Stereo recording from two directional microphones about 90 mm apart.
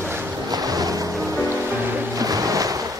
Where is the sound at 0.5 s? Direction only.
45° right (ahead or behind).